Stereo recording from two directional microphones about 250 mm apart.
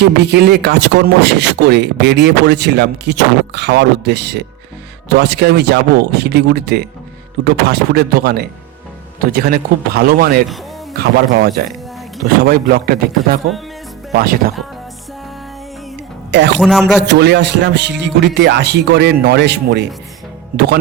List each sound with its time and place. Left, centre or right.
0.0 s speech: right
16.6 s a man's voice: centre
17.0 s speech: right